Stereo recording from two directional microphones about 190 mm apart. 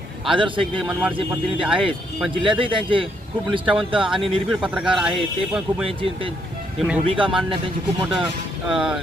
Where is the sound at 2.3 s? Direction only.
25° right (ahead or behind).